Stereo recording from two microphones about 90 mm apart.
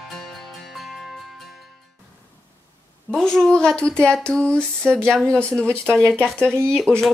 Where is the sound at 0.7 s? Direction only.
Centre (ahead or behind).